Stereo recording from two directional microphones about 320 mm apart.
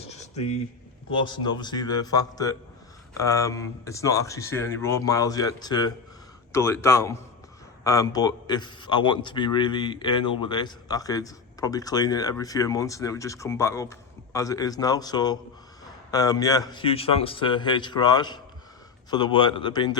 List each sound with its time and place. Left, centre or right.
1.1 s a man's voice: centre